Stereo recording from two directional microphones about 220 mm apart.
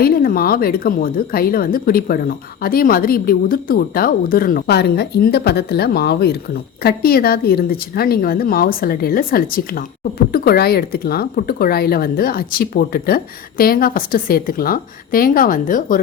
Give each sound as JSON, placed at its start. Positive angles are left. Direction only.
{"t": 0.0, "sound": "speech", "side_deg": 40}